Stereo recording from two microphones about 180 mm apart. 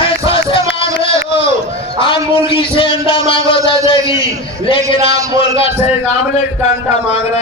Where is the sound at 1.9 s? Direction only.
30° left (ahead or behind).